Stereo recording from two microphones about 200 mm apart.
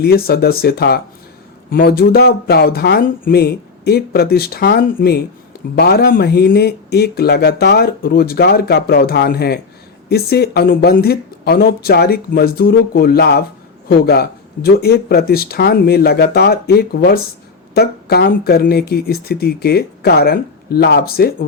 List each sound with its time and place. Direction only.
0.0 s speech: 50° left (ahead or behind)